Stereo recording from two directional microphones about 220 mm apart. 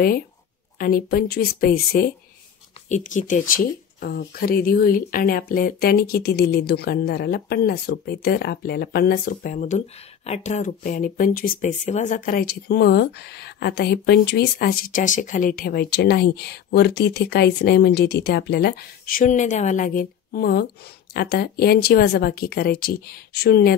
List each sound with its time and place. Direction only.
0.7 s speech: 40° left (ahead or behind)